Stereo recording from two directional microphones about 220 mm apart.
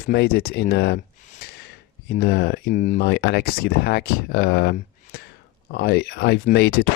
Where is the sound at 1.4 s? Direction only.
45° left (ahead or behind).